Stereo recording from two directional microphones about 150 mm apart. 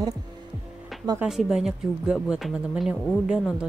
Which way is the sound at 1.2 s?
Centre (ahead or behind).